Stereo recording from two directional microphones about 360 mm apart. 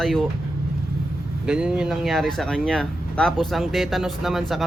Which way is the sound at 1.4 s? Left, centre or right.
Centre.